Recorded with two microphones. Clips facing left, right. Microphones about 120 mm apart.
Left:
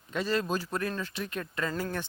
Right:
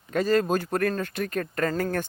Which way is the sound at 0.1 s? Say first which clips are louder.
Right 7 dB; 45° right (ahead or behind).